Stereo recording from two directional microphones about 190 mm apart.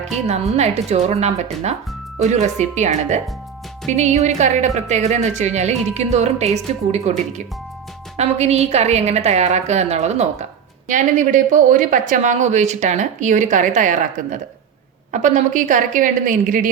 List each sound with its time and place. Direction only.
0.5 s a woman's voice: 35° right (ahead or behind)